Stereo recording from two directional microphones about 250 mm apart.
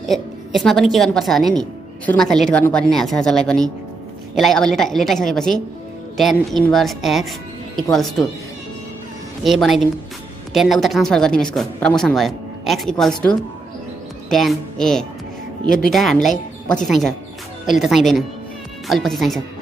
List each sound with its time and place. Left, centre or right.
0.1 s a woman's voice: centre
9.4 s a woman's voice: centre
14.3 s a woman's voice: centre